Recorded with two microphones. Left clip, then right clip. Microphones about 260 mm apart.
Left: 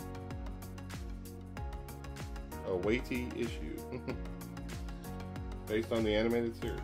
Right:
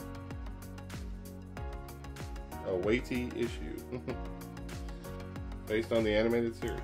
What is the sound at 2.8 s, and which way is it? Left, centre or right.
Speech, centre.